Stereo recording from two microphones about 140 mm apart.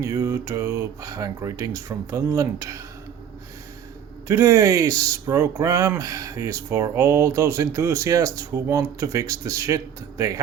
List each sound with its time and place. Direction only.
0.0 s speech: 20° right (ahead or behind)
4.3 s speech: 20° right (ahead or behind)